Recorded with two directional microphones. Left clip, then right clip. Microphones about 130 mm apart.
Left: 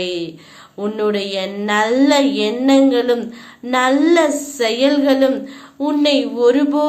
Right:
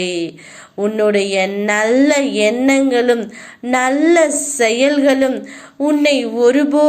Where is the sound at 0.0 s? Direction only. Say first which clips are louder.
Right 2 dB; 30° right (ahead or behind).